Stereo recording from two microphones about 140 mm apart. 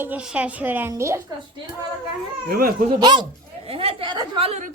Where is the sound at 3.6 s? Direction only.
45° right (ahead or behind).